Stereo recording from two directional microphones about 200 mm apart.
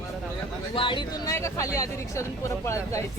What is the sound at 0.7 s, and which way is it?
Speech, 25° left (ahead or behind).